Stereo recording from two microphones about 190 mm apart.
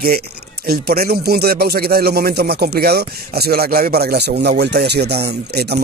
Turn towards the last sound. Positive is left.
turn(degrees=-55)  # may be behind; listen again after turning